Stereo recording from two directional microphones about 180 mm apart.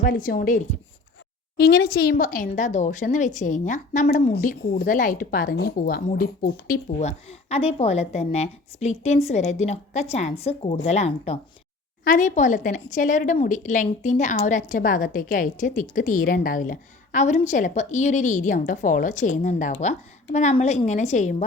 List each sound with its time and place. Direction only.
0.0 s a woman's voice: 50° left (ahead or behind)
1.5 s a woman's voice: 60° left (ahead or behind); by 4.0 s 45° left (ahead or behind)
4.4 s a woman's voice: 60° left (ahead or behind)
7.0 s a woman's voice: 40° left (ahead or behind)